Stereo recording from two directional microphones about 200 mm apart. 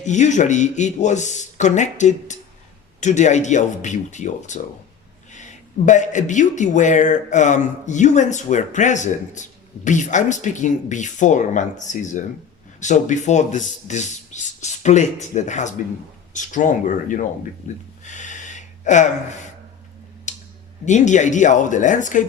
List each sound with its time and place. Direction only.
0.0 s speech: 35° left (ahead or behind)
18.0 s gasp: 40° left (ahead or behind)
20.3 s a sound: 35° left (ahead or behind)
20.8 s speech: 35° left (ahead or behind)